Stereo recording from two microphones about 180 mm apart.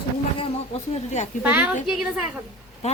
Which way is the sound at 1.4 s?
10° right (ahead or behind).